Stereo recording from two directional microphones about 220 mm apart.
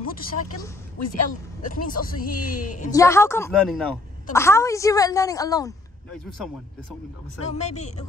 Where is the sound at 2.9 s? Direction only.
15° left (ahead or behind).